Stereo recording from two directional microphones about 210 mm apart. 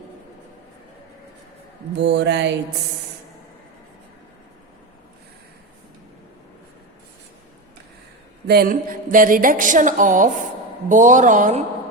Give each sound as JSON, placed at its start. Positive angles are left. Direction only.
{"t": 2.0, "sound": "mantra", "side_deg": -55}
{"t": 8.4, "sound": "a woman's voice", "side_deg": -45}